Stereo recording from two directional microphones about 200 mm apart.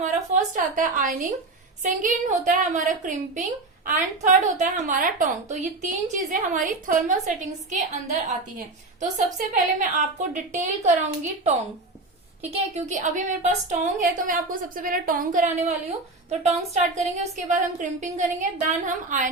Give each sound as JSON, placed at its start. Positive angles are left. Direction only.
{"t": 0.0, "sound": "a woman's voice", "side_deg": -40}